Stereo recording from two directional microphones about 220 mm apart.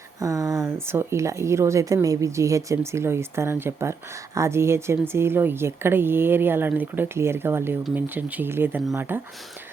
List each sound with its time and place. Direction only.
0.2 s speech: 15° right (ahead or behind)